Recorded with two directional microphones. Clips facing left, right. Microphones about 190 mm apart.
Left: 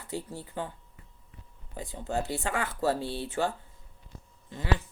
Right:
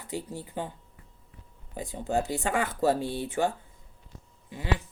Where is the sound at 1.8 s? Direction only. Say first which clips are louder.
Right 4 dB; 15° right (ahead or behind).